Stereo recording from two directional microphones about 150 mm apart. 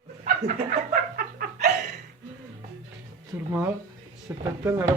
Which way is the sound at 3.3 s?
20° right (ahead or behind).